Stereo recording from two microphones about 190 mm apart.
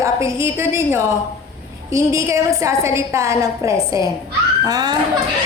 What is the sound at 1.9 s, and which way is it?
A woman's voice, 15° right (ahead or behind).